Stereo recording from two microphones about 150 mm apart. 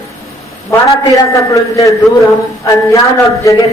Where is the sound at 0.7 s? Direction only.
20° left (ahead or behind).